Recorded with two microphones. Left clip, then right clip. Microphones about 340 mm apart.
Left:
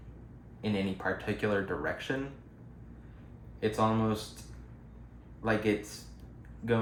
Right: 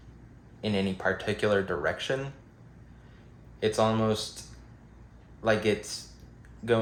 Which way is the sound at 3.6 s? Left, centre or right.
Right.